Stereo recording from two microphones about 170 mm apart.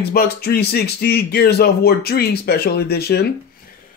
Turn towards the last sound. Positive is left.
turn(degrees=70)  # may be behind; listen again after turning